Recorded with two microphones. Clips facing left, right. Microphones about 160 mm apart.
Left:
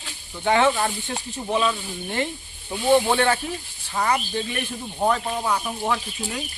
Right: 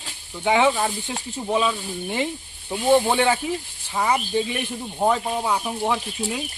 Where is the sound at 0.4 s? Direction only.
15° right (ahead or behind).